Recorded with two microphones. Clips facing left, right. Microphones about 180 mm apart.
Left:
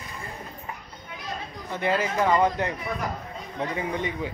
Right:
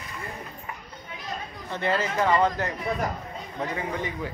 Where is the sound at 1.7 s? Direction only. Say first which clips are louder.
Left 1 dB; 15° left (ahead or behind).